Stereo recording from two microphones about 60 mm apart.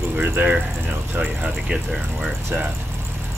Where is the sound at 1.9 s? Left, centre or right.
Centre.